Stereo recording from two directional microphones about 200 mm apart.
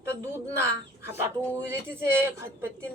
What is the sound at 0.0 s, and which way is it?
Speech, 15° right (ahead or behind).